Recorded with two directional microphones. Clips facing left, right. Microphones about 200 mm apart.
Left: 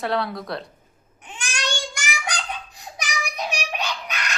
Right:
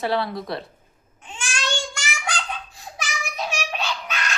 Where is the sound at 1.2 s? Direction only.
15° left (ahead or behind).